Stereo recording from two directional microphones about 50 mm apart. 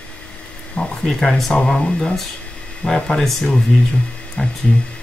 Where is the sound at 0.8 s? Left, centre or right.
Left.